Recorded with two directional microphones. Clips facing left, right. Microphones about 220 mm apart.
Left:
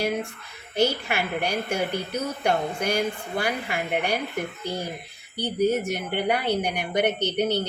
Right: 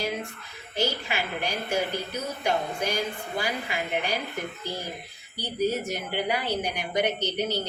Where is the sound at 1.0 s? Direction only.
55° left (ahead or behind).